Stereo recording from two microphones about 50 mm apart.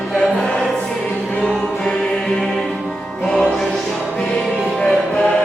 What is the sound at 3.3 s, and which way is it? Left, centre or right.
Music, centre.